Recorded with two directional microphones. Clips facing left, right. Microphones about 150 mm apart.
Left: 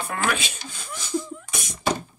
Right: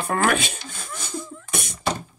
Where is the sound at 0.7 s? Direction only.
55° right (ahead or behind).